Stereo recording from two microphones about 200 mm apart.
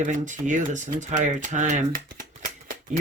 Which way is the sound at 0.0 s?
40° right (ahead or behind).